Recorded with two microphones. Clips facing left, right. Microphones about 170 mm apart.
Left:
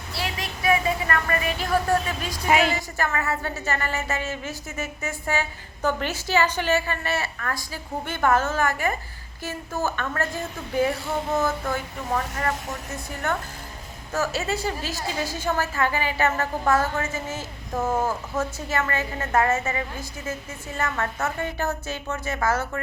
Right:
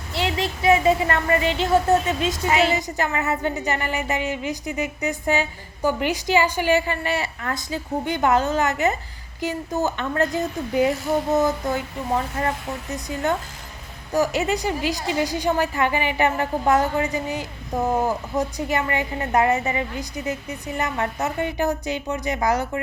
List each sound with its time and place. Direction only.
0.1 s a woman's voice: 25° right (ahead or behind)